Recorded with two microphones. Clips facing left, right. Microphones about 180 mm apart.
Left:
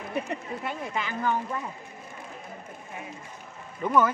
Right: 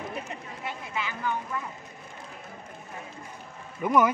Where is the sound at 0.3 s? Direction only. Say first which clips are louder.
Left 5 dB; 50° left (ahead or behind).